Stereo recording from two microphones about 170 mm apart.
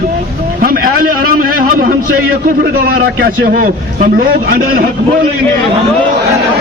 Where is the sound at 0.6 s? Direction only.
60° right (ahead or behind).